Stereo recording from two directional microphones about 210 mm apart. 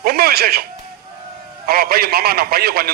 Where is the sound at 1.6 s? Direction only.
45° right (ahead or behind).